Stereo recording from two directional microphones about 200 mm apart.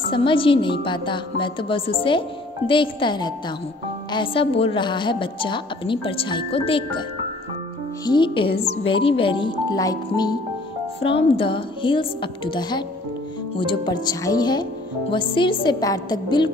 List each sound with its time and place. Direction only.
0.1 s a woman's voice: 25° left (ahead or behind)
8.0 s a woman's voice: 20° left (ahead or behind)